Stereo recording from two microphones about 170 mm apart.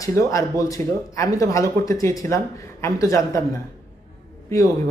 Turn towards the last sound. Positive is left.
turn(degrees=20)  # may be behind; listen again after turning